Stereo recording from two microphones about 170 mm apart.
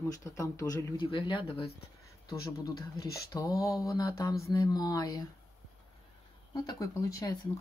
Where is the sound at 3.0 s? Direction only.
65° left (ahead or behind).